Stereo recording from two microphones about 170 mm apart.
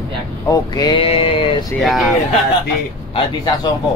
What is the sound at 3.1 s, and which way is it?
Speech, 25° left (ahead or behind).